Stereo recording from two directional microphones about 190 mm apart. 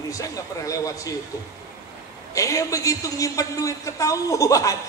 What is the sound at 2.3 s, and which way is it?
A woman's voice, 15° left (ahead or behind).